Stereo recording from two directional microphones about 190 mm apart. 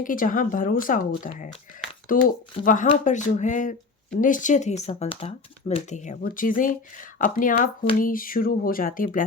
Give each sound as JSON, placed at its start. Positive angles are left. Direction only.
{"t": 0.0, "sound": "speech", "side_deg": 45}